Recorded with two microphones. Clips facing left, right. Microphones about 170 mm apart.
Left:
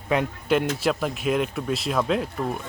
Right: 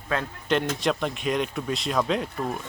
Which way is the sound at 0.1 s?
10° left (ahead or behind).